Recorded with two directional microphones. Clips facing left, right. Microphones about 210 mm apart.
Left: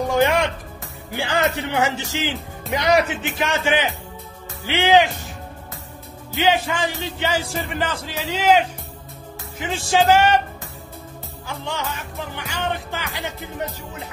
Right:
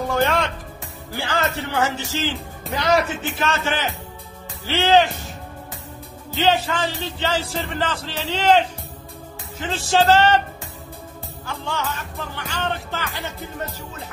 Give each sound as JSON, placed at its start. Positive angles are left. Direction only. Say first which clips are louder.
{"t": 0.1, "sound": "music", "louder": "left 2 dB", "side_deg": 15}
{"t": 1.1, "sound": "speech", "louder": "left 3 dB", "side_deg": 15}
{"t": 6.3, "sound": "speech", "louder": "even", "side_deg": 15}
{"t": 11.4, "sound": "speech", "louder": "right 1 dB", "side_deg": 15}